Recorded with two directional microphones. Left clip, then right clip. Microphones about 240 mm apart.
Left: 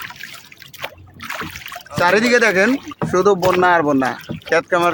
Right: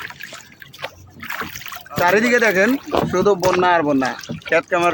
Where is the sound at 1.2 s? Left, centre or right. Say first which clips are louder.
Even; centre.